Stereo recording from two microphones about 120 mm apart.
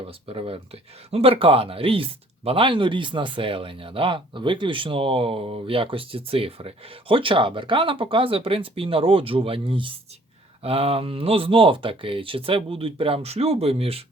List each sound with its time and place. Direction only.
0.0 s speech: 50° right (ahead or behind)